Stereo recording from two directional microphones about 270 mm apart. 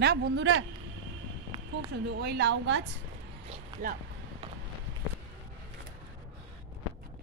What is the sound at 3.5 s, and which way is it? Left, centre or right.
Speech, right.